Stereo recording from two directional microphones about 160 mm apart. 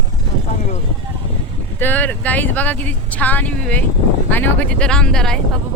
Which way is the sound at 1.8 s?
10° left (ahead or behind).